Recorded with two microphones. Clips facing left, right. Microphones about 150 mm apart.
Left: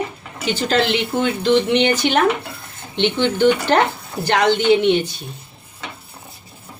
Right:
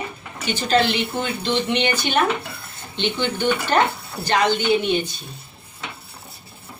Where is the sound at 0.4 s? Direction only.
90° left.